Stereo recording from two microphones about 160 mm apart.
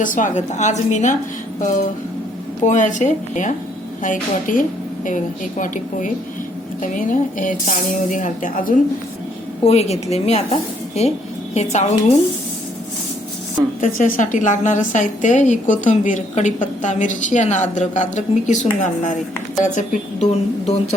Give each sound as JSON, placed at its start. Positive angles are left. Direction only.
{"t": 0.0, "sound": "a woman's voice", "side_deg": 55}
{"t": 2.6, "sound": "a woman's voice", "side_deg": 50}
{"t": 9.6, "sound": "a woman's voice", "side_deg": 40}
{"t": 13.8, "sound": "a woman's voice", "side_deg": 50}